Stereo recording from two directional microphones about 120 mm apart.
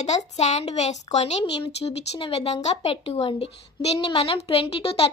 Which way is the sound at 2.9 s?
50° left (ahead or behind).